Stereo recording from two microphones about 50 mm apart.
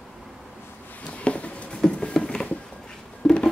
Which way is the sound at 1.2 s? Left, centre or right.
Left.